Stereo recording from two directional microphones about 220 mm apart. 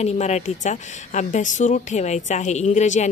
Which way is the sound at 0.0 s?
30° left (ahead or behind).